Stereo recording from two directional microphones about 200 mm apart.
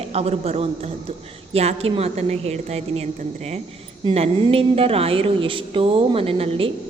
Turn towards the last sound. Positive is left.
turn(degrees=-30)  # may be behind; listen again after turning